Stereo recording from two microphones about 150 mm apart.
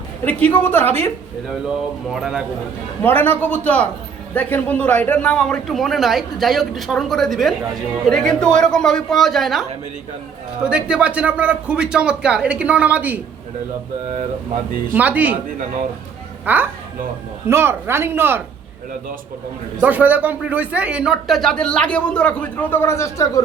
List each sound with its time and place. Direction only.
0.3 s a man's voice: 10° left (ahead or behind)
2.1 s speech: 5° right (ahead or behind)
3.0 s a man's voice: 15° left (ahead or behind); by 13.1 s 10° right (ahead or behind)
14.9 s speech: 10° right (ahead or behind)
16.5 s speech: 10° right (ahead or behind)
19.8 s speech: 10° right (ahead or behind); by 23.4 s 20° left (ahead or behind)